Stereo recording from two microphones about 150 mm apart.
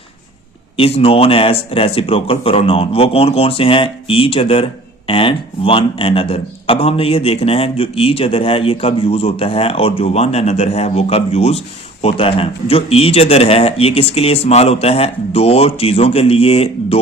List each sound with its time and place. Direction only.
0.8 s a man's voice: 40° left (ahead or behind)